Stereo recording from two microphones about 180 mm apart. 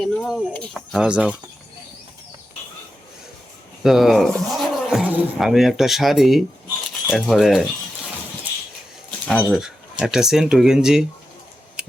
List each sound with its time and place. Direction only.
0.0 s speech: centre (ahead or behind)
3.8 s speech: centre (ahead or behind)
9.2 s speech: 5° left (ahead or behind)
9.6 s speech: 5° right (ahead or behind)